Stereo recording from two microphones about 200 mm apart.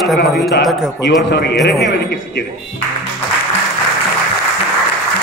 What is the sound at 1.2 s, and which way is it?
Speech, 60° left (ahead or behind).